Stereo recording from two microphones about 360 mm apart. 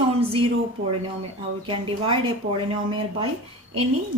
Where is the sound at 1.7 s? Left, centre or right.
Centre.